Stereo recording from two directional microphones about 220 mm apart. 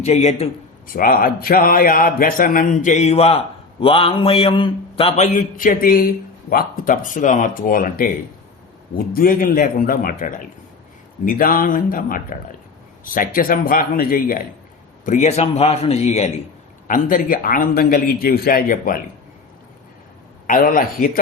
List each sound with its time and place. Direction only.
0.0 s a man's voice: 30° left (ahead or behind)
9.1 s a man's voice: 40° left (ahead or behind)
20.5 s a man's voice: 35° left (ahead or behind)